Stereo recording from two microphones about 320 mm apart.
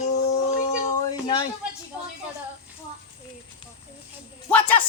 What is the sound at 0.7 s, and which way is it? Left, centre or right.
Speech, centre.